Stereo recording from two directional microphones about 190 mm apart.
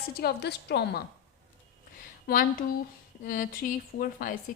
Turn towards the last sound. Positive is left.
turn(degrees=45)  # may be behind; listen again after turning